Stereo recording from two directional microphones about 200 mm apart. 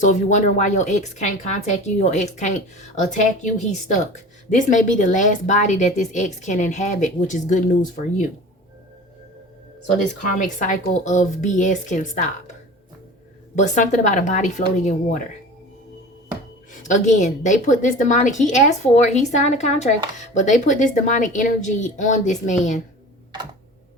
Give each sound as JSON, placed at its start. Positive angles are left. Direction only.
{"t": 0.0, "sound": "speech", "side_deg": 35}
{"t": 10.2, "sound": "speech", "side_deg": 40}
{"t": 13.6, "sound": "speech", "side_deg": 40}
{"t": 16.7, "sound": "speech", "side_deg": 40}